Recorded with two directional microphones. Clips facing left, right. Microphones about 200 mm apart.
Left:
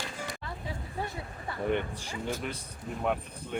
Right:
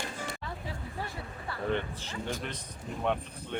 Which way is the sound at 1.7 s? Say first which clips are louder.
Left 1 dB; 10° left (ahead or behind).